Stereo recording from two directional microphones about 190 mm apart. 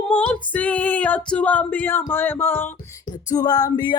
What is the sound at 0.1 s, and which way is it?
Music, 5° left (ahead or behind).